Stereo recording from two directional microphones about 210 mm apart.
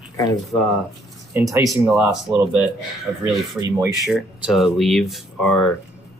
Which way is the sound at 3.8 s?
5° right (ahead or behind).